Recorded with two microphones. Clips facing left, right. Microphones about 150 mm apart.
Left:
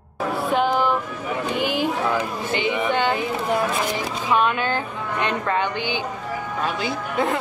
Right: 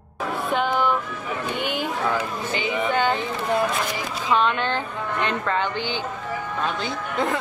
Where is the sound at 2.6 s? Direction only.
20° left (ahead or behind).